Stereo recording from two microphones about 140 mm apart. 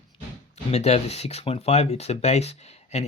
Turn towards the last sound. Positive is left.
turn(degrees=50)  # may be behind; listen again after turning